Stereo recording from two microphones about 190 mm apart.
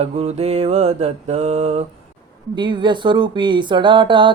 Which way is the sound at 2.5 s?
25° right (ahead or behind).